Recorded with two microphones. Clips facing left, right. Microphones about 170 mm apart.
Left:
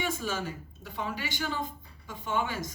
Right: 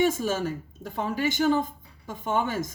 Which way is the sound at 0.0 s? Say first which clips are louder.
Right 8 dB; 45° right (ahead or behind).